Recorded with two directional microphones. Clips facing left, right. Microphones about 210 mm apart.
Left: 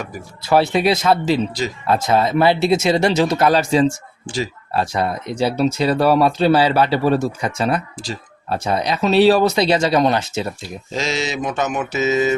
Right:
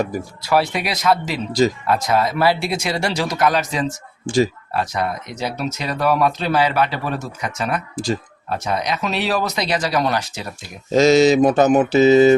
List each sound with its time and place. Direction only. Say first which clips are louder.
0.4 s speech: left 5 dB; 25° left (ahead or behind)
7.9 s speech: right 7 dB; 45° right (ahead or behind)
8.4 s speech: left 2 dB; 30° left (ahead or behind)
10.9 s mantra: right 11 dB; 40° right (ahead or behind)